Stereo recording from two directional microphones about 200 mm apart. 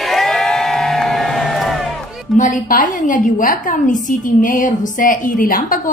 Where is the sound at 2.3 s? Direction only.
40° left (ahead or behind).